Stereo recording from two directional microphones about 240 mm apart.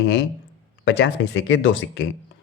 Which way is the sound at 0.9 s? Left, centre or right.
Left.